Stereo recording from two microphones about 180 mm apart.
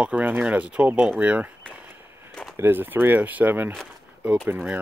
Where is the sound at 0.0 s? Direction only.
10° right (ahead or behind).